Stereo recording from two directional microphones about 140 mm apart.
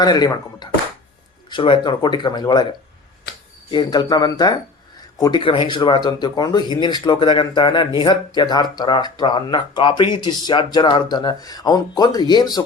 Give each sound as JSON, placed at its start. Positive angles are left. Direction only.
{"t": 0.0, "sound": "speech", "side_deg": 30}
{"t": 3.7, "sound": "speech", "side_deg": 30}
{"t": 5.4, "sound": "speech", "side_deg": 40}